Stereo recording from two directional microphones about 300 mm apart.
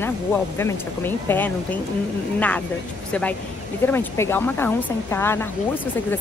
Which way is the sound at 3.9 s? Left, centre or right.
Centre.